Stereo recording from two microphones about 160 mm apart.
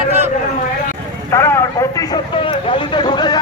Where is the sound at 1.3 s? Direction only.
15° left (ahead or behind).